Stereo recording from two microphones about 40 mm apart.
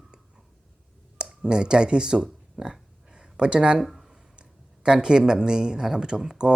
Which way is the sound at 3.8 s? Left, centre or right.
Centre.